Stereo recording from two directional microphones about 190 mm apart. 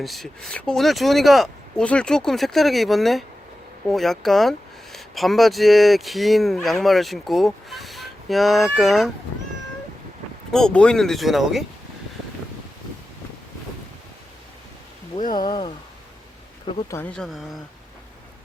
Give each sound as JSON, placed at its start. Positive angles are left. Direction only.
{"t": 0.0, "sound": "speech", "side_deg": 0}
{"t": 10.5, "sound": "speech", "side_deg": 5}
{"t": 15.4, "sound": "speech", "side_deg": 25}
{"t": 16.9, "sound": "speech", "side_deg": 5}